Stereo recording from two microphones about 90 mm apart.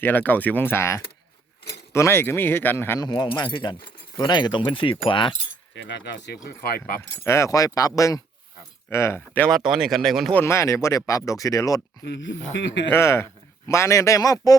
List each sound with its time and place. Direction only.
0.0 s speech: 20° left (ahead or behind)
3.0 s speech: 45° left (ahead or behind); by 5.4 s 70° left (ahead or behind)
7.3 s speech: 35° left (ahead or behind)
9.5 s speech: 5° right (ahead or behind)
10.4 s speech: 30° left (ahead or behind)
12.9 s speech: 30° left (ahead or behind)